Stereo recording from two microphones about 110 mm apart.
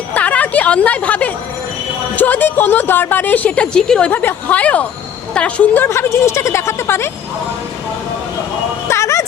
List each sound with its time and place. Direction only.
0.1 s a sound: 15° left (ahead or behind)
2.1 s a woman's voice: 15° left (ahead or behind)
8.9 s bow-wow: 25° left (ahead or behind)